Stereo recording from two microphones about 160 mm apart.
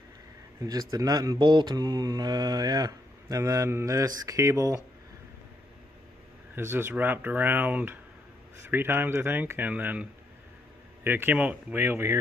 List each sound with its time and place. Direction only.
0.6 s speech: 20° right (ahead or behind)
6.5 s speech: 15° right (ahead or behind)
11.1 s speech: 15° right (ahead or behind)